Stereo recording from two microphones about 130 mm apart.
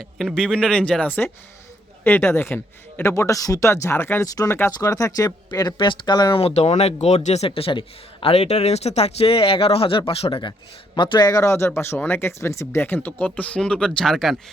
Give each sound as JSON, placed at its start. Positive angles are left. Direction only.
{"t": 0.0, "sound": "speech", "side_deg": 5}
{"t": 6.4, "sound": "a man's voice", "side_deg": 55}